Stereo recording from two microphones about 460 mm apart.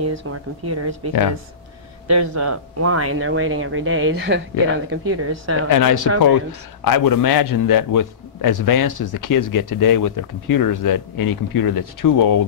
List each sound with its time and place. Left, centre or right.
0.1 s speech: right
5.7 s a man's voice: left